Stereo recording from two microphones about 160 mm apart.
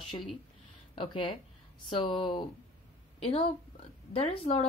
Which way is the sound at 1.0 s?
30° left (ahead or behind).